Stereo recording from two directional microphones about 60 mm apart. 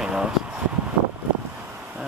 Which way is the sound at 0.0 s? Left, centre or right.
Centre.